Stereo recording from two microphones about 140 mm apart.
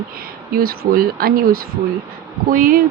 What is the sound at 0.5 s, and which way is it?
Speech, 90° right.